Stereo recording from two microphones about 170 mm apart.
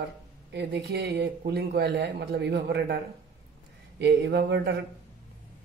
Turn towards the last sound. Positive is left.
turn(degrees=-75)  # may be behind; listen again after turning